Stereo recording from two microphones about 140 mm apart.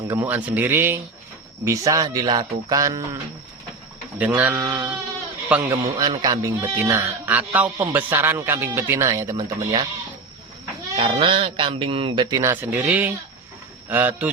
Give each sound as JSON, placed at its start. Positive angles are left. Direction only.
{"t": 0.2, "sound": "a man's voice", "side_deg": -10}
{"t": 4.2, "sound": "a man's voice", "side_deg": -10}
{"t": 5.7, "sound": "speech", "side_deg": -25}
{"t": 10.9, "sound": "speech", "side_deg": -45}
{"t": 12.7, "sound": "a man's voice", "side_deg": -10}